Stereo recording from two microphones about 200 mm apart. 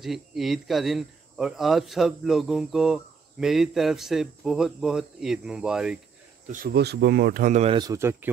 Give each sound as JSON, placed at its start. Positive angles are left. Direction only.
{"t": 0.0, "sound": "speech", "side_deg": 0}
{"t": 6.4, "sound": "speech", "side_deg": -45}
{"t": 7.7, "sound": "speech", "side_deg": -20}